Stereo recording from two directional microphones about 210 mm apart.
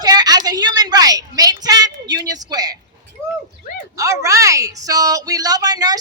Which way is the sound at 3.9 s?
15° right (ahead or behind).